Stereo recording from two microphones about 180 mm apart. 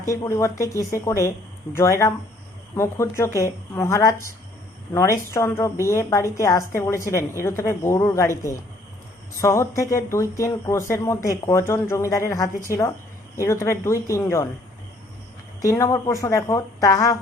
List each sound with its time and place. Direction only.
0.1 s speech: 15° left (ahead or behind)
15.6 s speech: 20° left (ahead or behind)